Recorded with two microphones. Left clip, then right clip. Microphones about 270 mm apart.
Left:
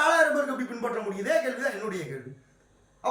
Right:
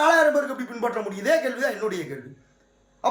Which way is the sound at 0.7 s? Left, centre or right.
Right.